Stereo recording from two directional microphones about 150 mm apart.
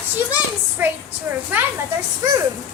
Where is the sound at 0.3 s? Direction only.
10° right (ahead or behind).